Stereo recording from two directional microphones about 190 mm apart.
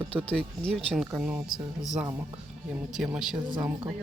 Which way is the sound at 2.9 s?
Centre (ahead or behind).